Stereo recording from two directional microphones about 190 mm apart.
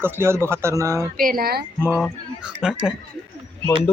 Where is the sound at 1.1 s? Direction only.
50° right (ahead or behind).